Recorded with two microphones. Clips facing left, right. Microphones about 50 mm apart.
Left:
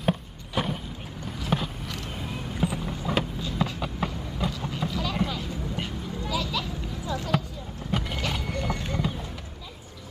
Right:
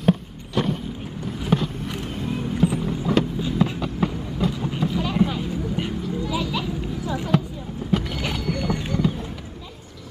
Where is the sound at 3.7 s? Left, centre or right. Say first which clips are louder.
Right 5 dB; centre.